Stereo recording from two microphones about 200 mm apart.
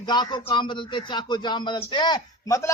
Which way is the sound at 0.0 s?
20° left (ahead or behind).